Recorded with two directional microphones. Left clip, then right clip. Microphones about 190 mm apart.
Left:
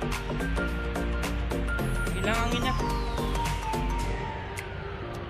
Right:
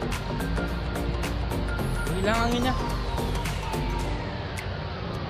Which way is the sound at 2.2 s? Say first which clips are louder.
Right 3 dB; 20° right (ahead or behind).